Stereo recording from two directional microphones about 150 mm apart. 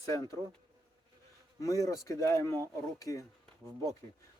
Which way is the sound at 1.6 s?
20° left (ahead or behind).